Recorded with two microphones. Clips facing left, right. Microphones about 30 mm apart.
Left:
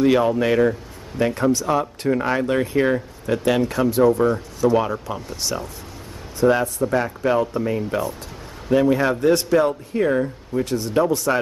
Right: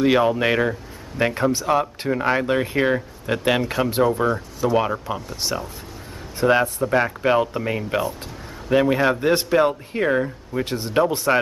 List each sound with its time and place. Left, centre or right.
0.0 s a man's voice: centre
4.2 s a man's voice: centre